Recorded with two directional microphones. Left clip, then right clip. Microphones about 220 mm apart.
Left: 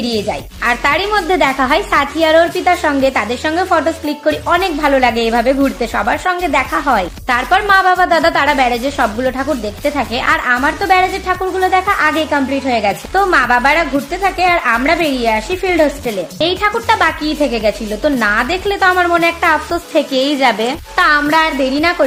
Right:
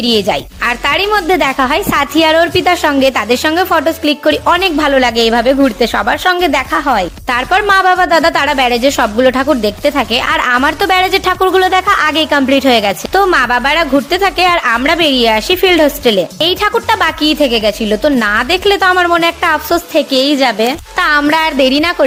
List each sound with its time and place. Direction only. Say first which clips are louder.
0.0 s a woman's voice: right 6 dB; 30° right (ahead or behind)
21.0 s a woman's voice: right 1 dB; 30° right (ahead or behind)